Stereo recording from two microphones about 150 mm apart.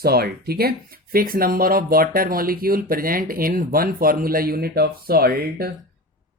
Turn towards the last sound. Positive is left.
turn(degrees=-90)